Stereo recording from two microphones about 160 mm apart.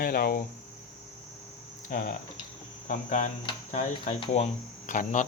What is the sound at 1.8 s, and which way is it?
Speech, 55° left (ahead or behind).